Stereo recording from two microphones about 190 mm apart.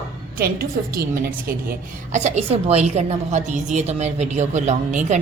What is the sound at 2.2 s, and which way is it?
A woman's voice, 35° right (ahead or behind).